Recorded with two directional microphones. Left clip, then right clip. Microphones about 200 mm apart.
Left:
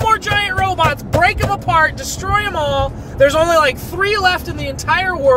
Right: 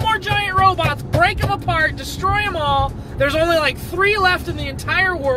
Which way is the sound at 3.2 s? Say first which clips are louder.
Left 5 dB; 15° left (ahead or behind).